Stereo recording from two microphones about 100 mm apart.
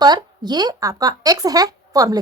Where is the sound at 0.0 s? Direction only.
45° right (ahead or behind).